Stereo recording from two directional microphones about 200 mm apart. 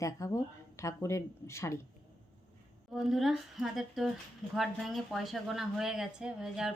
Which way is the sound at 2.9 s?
Centre (ahead or behind).